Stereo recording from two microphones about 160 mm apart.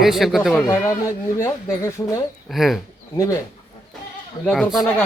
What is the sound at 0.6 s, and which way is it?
Speech, 20° left (ahead or behind).